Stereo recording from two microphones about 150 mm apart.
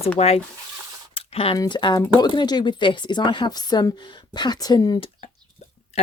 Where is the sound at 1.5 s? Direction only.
25° left (ahead or behind).